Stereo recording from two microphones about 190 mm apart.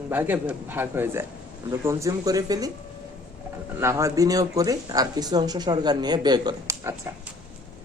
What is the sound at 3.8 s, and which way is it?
Speech, 15° right (ahead or behind).